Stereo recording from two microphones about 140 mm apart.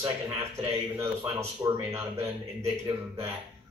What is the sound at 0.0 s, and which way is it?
A man's voice, 25° right (ahead or behind).